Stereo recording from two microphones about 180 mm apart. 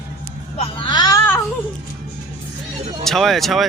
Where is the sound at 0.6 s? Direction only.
25° left (ahead or behind).